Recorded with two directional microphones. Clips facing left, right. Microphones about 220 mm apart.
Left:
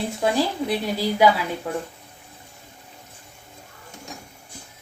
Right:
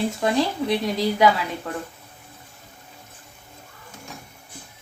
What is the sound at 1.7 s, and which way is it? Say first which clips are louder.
Speech: left 3 dB; 10° left (ahead or behind).